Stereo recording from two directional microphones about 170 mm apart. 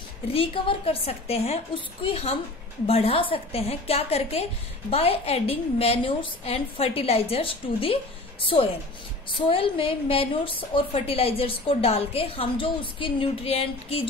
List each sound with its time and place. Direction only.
0.3 s a woman's voice: 35° left (ahead or behind)